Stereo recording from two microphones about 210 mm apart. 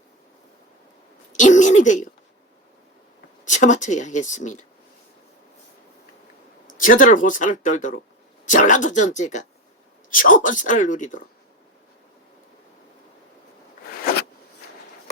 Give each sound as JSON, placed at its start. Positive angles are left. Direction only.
{"t": 1.3, "sound": "a sound", "side_deg": 35}
{"t": 3.4, "sound": "speech", "side_deg": 35}
{"t": 6.7, "sound": "speech", "side_deg": 40}